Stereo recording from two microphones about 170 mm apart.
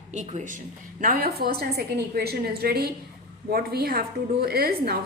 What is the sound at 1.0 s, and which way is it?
A woman's voice, 60° right (ahead or behind).